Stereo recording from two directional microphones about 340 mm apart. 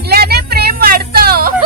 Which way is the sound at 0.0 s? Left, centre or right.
Right.